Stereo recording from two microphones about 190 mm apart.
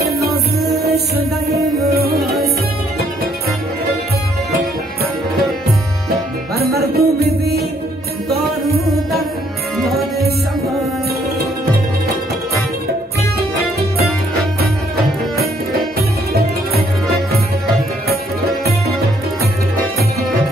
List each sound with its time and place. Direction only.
0.0 s music: 55° right (ahead or behind)
6.5 s music: 55° right (ahead or behind)
9.8 s music: 55° right (ahead or behind)
13.4 s music: 55° right (ahead or behind)
16.0 s music: 55° right (ahead or behind)